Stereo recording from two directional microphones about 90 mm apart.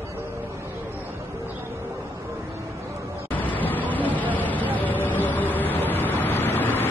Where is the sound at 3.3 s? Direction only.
20° left (ahead or behind).